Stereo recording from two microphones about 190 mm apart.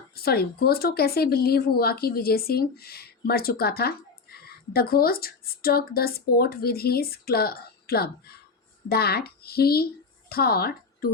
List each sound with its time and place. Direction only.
0.2 s a woman's voice: 55° left (ahead or behind)